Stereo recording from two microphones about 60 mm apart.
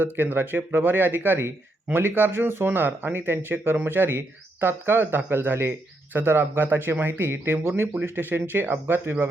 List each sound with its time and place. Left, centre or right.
0.0 s speech: right